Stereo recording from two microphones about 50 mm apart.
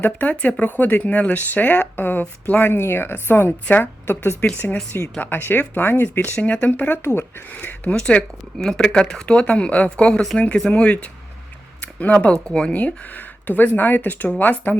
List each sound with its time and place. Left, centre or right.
0.0 s speech: left
4.6 s speech: left
6.3 s speech: left
7.0 s speech: left
7.5 s speech: left
7.9 s speech: centre
12.7 s speech: left